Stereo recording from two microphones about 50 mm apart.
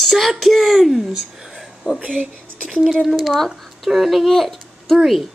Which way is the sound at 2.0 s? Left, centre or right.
Right.